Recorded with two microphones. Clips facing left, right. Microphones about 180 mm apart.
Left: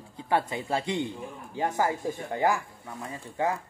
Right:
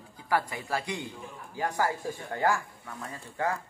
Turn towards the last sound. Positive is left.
turn(degrees=20)  # may be behind; listen again after turning